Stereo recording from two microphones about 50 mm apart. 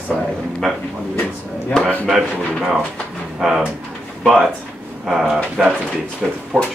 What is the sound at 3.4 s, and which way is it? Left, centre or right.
Speech, centre.